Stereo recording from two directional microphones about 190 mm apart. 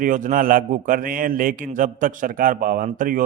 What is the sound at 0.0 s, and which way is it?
Speech, 45° right (ahead or behind).